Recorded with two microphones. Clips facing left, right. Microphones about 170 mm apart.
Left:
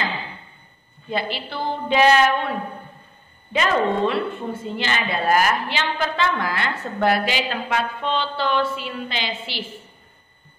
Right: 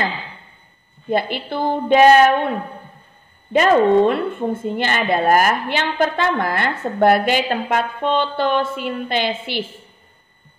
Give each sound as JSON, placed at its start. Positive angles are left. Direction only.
{"t": 1.1, "sound": "a woman's voice", "side_deg": -55}
{"t": 3.5, "sound": "a woman's voice", "side_deg": -50}